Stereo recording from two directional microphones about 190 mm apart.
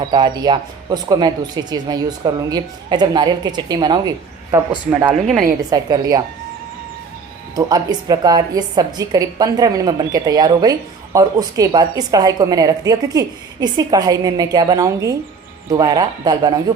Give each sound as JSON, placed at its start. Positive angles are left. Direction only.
{"t": 0.1, "sound": "a woman's voice", "side_deg": -25}
{"t": 4.5, "sound": "a man's voice", "side_deg": -10}
{"t": 5.7, "sound": "a woman's voice", "side_deg": -20}
{"t": 7.5, "sound": "a woman's voice", "side_deg": -20}